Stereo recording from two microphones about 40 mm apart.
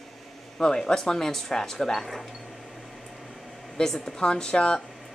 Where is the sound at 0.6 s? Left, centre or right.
Centre.